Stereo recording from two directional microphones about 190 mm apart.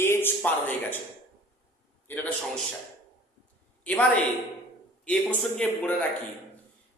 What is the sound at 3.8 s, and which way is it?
A man's voice, 5° left (ahead or behind).